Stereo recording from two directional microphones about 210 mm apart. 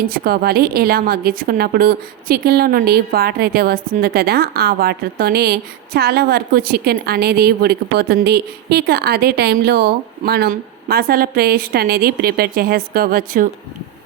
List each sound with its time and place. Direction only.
0.0 s a woman's voice: 45° right (ahead or behind)